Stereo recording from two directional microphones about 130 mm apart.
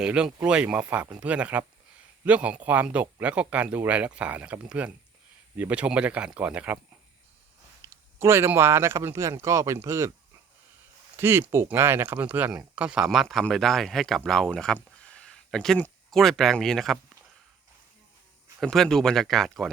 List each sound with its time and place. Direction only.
0.0 s speech: 5° right (ahead or behind)
7.9 s speech: 20° right (ahead or behind)
11.2 s speech: 15° right (ahead or behind); by 17.0 s centre (ahead or behind)
18.6 s speech: 5° left (ahead or behind)